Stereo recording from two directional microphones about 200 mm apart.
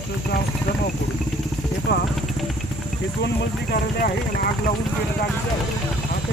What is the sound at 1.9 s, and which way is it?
Speech, 60° left (ahead or behind).